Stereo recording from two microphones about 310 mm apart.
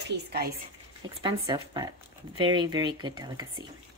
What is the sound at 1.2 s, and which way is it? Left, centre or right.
A woman's voice, centre.